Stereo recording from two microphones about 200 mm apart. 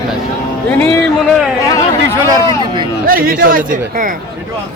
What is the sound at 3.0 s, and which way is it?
Speech, 45° right (ahead or behind).